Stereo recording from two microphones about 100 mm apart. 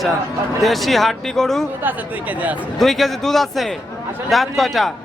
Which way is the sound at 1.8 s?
15° right (ahead or behind).